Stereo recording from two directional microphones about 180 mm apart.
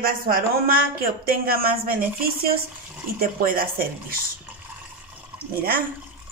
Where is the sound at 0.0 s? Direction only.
55° right (ahead or behind).